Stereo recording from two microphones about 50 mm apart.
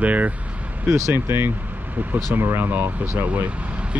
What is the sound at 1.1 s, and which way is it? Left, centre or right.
Speech, right.